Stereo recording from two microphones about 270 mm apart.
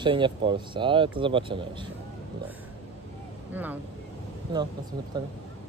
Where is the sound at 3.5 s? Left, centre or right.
Centre.